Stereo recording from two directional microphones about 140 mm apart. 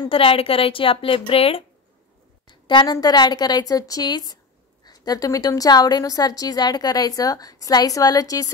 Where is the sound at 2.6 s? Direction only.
35° left (ahead or behind).